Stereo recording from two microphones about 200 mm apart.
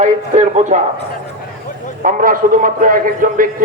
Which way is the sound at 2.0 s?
45° right (ahead or behind).